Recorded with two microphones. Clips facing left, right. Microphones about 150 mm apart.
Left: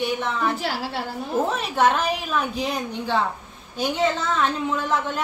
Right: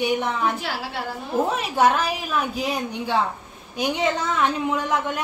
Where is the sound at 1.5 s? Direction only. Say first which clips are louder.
Right 2 dB; 10° right (ahead or behind).